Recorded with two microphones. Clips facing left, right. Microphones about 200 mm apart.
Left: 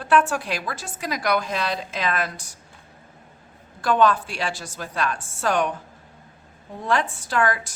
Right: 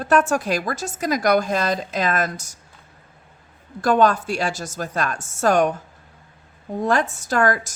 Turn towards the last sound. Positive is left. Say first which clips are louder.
# right 3 dB
turn(degrees=-45)  # may be behind; listen again after turning